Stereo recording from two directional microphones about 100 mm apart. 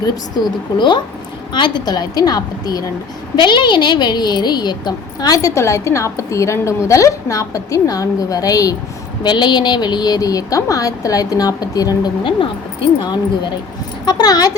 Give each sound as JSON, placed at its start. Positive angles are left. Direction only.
{"t": 0.0, "sound": "a woman's voice", "side_deg": 45}
{"t": 9.2, "sound": "a woman's voice", "side_deg": 50}
{"t": 13.0, "sound": "a woman's voice", "side_deg": 50}